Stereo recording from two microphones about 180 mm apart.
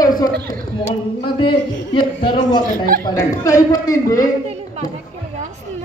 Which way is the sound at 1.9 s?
30° left (ahead or behind).